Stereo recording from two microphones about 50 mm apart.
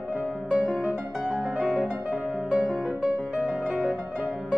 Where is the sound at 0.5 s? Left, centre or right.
Right.